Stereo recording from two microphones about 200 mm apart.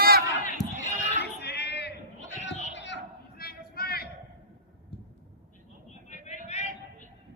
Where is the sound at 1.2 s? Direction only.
55° left (ahead or behind).